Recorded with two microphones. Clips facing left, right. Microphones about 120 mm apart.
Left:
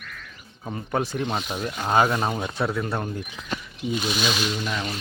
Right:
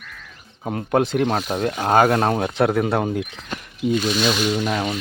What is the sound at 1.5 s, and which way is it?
Speech, 55° right (ahead or behind).